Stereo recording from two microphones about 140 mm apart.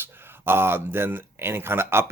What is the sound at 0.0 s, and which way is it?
Speech, 15° right (ahead or behind).